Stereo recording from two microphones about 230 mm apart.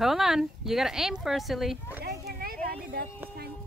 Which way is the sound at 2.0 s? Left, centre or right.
Right.